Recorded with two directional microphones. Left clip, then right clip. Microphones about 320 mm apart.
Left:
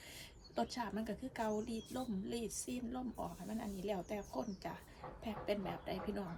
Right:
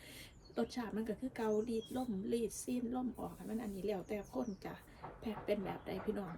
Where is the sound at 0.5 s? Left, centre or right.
Centre.